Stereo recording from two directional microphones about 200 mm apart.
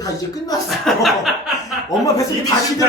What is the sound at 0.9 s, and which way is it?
Speech, centre (ahead or behind).